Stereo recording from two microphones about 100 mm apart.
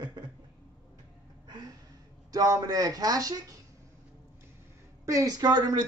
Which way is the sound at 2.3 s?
40° right (ahead or behind).